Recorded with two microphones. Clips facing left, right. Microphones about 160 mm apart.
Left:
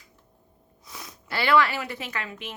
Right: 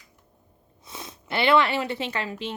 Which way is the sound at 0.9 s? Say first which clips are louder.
Right 3 dB; 25° right (ahead or behind).